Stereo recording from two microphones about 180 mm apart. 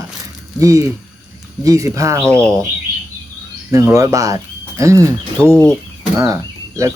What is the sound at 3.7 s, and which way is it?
Speech, 15° right (ahead or behind).